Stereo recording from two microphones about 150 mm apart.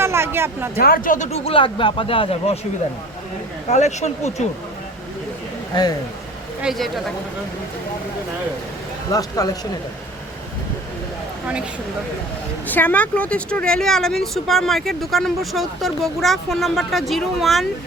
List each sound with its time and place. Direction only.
0.0 s a sound: 15° right (ahead or behind)
0.8 s speech: 70° left (ahead or behind)
1.5 s speech: 35° left (ahead or behind)
3.7 s speech: 50° left (ahead or behind)
6.6 s speech: centre (ahead or behind)
9.1 s speech: 25° left (ahead or behind)
12.6 s speech: 10° left (ahead or behind)